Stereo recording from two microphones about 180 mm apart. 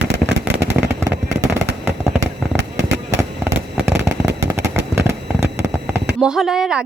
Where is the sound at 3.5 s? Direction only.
15° right (ahead or behind).